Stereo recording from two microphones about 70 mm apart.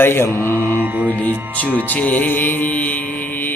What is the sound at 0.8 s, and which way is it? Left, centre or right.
Mantra, right.